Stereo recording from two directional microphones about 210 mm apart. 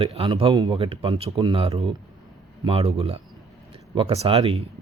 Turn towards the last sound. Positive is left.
turn(degrees=-30)  # may be behind; listen again after turning